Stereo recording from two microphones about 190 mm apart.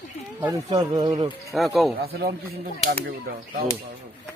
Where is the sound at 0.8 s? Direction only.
20° right (ahead or behind).